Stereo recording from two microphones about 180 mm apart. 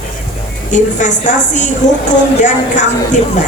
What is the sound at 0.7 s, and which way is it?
Speech, 45° left (ahead or behind).